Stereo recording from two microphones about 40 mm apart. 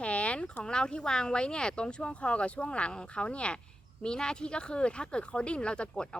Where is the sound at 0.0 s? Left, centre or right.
Left.